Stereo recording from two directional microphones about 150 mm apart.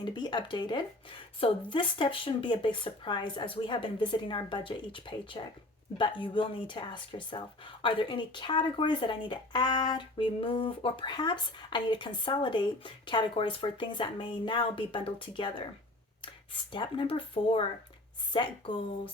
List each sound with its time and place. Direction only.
0.0 s speech: 30° left (ahead or behind)
16.7 s speech: 35° left (ahead or behind)